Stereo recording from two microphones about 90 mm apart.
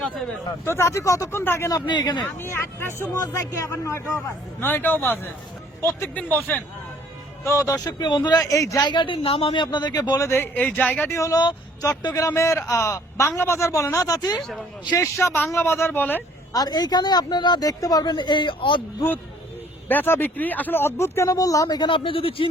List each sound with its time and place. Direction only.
0.6 s a man's voice: 30° left (ahead or behind)
1.9 s speech: 55° left (ahead or behind)
2.5 s speech: 30° left (ahead or behind)
3.2 s a man's voice: 40° left (ahead or behind); by 6.6 s 20° left (ahead or behind)
7.4 s speech: 35° left (ahead or behind); by 8.4 s 50° left (ahead or behind)
8.4 s a man's voice: 35° left (ahead or behind)
8.9 s speech: 65° left (ahead or behind); by 10.2 s 50° left (ahead or behind)
10.2 s speech: 25° left (ahead or behind)
11.1 s a man's voice: 40° left (ahead or behind)
14.9 s speech: 35° left (ahead or behind)
16.5 s speech: 45° left (ahead or behind); by 18.8 s 60° left (ahead or behind)
19.9 s speech: 25° left (ahead or behind); by 21.8 s 40° left (ahead or behind)
21.8 s speech: 65° left (ahead or behind); by 22.4 s 90° left